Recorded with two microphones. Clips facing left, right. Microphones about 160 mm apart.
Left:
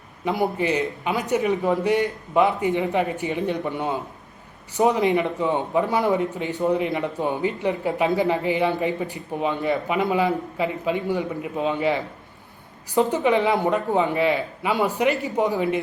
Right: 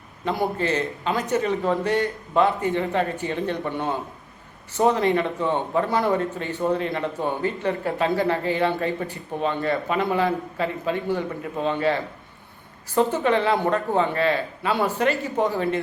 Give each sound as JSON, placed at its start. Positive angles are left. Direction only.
{"t": 0.3, "sound": "a man's voice", "side_deg": 15}